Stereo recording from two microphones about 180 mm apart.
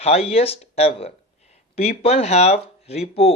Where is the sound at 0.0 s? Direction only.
35° left (ahead or behind).